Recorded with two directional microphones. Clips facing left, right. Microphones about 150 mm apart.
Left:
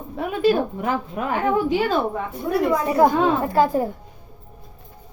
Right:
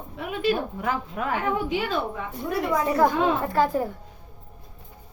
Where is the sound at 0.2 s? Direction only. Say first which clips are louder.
Left 6 dB; 40° left (ahead or behind).